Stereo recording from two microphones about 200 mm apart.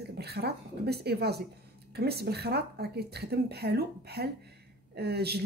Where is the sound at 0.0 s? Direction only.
55° right (ahead or behind).